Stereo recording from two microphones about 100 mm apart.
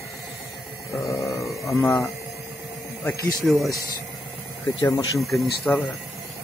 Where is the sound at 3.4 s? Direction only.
Centre (ahead or behind).